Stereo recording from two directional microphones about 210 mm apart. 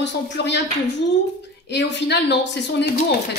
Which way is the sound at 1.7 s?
55° left (ahead or behind).